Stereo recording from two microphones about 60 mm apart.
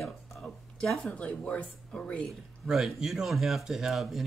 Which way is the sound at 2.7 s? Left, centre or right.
Centre.